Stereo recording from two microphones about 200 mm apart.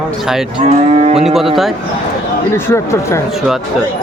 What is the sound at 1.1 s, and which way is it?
Speech, centre (ahead or behind).